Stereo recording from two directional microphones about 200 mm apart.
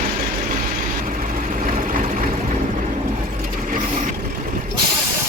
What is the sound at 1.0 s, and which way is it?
Vehicle, 45° right (ahead or behind).